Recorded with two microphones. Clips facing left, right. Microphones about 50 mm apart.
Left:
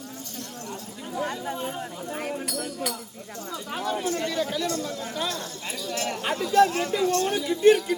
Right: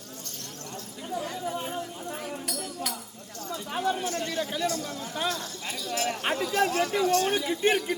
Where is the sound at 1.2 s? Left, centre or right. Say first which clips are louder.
Left 5 dB; left.